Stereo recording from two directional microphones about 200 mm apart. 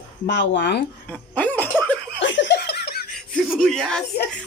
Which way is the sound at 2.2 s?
65° left (ahead or behind).